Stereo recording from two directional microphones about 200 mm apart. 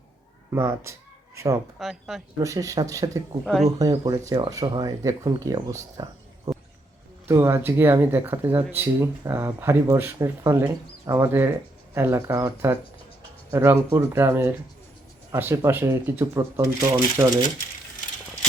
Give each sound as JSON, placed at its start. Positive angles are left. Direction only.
{"t": 0.5, "sound": "speech", "side_deg": -15}
{"t": 1.8, "sound": "speech", "side_deg": 0}
{"t": 2.4, "sound": "speech", "side_deg": -15}
{"t": 3.4, "sound": "speech", "side_deg": 0}
{"t": 3.8, "sound": "speech", "side_deg": -20}